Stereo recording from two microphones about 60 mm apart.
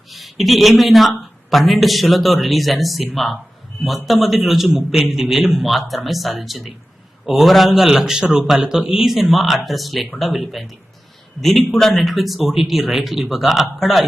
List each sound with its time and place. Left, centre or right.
0.1 s a man's voice: centre